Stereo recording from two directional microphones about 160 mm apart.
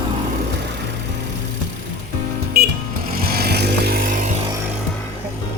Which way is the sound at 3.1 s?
70° right (ahead or behind).